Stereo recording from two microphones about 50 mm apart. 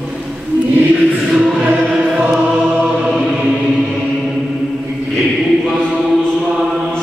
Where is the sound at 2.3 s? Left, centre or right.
Centre.